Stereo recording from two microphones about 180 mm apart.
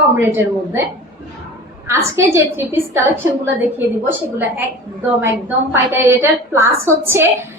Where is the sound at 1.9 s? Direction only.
15° right (ahead or behind).